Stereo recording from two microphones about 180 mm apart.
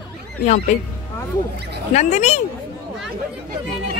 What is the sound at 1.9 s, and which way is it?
Speech, 40° left (ahead or behind).